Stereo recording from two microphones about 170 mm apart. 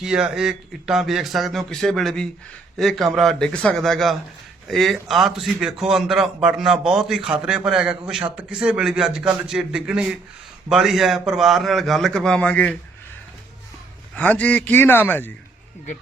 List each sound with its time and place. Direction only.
0.0 s a man's voice: 5° right (ahead or behind)
14.2 s a man's voice: 10° left (ahead or behind)